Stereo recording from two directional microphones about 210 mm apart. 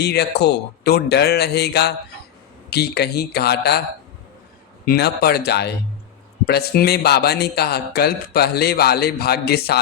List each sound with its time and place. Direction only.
0.0 s a man's voice: 50° left (ahead or behind)
4.9 s a man's voice: 50° left (ahead or behind)